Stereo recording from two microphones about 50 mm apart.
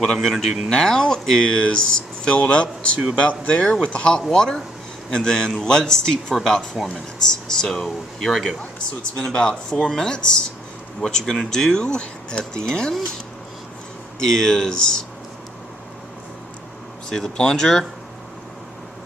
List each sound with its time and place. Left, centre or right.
0.0 s speech: centre
3.6 s speech: centre
14.2 s speech: centre
17.1 s speech: centre